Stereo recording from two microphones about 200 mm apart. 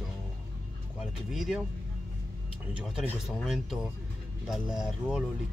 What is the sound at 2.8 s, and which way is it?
Speech, centre (ahead or behind).